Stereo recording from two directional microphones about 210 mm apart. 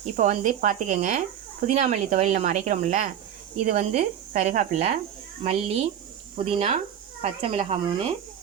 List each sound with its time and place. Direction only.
0.0 s speech: 35° right (ahead or behind)